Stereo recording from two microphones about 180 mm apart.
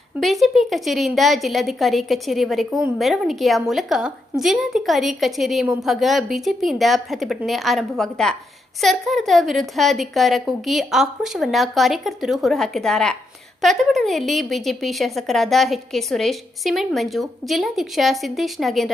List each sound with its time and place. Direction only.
0.2 s a woman's voice: centre (ahead or behind)